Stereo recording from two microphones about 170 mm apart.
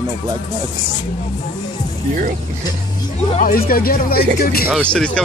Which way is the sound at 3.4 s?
55° left (ahead or behind).